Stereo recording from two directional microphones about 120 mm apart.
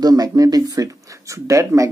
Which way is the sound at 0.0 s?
35° right (ahead or behind).